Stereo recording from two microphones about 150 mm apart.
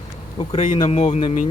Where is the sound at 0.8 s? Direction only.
45° left (ahead or behind).